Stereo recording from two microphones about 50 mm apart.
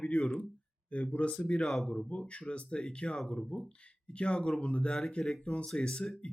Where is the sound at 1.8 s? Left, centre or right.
Left.